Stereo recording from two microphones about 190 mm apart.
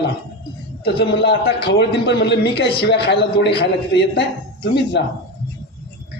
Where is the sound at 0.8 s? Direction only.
60° left (ahead or behind).